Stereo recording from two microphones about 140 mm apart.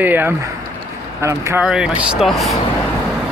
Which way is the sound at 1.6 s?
5° right (ahead or behind).